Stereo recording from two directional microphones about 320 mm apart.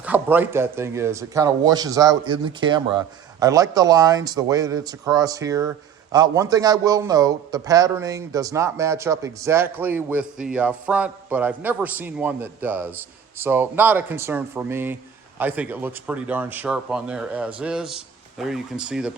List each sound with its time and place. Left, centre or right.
0.0 s speech: centre